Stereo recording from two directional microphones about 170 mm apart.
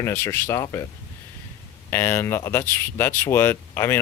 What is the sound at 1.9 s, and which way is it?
Speech, 15° left (ahead or behind).